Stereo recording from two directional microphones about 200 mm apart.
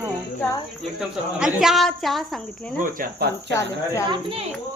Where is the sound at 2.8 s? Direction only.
55° right (ahead or behind).